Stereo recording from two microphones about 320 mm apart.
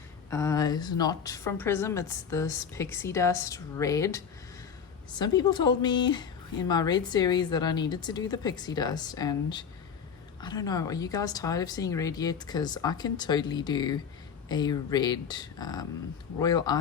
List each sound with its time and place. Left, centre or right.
0.3 s a woman's voice: centre